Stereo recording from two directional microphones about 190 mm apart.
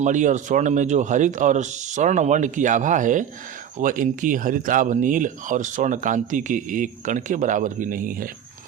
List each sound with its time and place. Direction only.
0.0 s speech: 40° right (ahead or behind)